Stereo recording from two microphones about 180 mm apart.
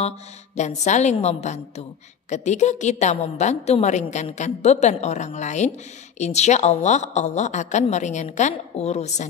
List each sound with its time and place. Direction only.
0.6 s a woman's voice: 40° left (ahead or behind)